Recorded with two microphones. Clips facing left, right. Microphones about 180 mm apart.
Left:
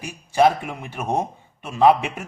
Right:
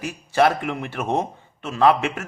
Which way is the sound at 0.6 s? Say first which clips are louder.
Right 5 dB; 75° right (ahead or behind).